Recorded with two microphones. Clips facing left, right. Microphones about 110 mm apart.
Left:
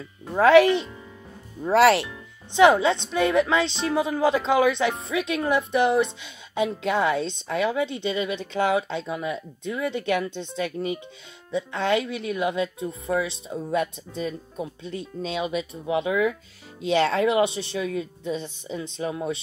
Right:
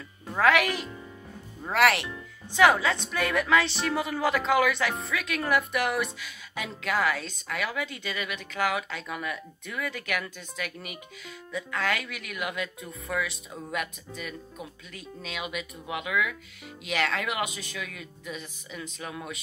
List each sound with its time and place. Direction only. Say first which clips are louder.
0.4 s a woman's voice: left 8 dB; 30° left (ahead or behind)